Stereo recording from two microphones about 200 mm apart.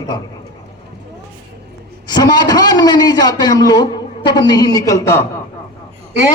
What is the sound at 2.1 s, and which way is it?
A man's voice, 20° left (ahead or behind).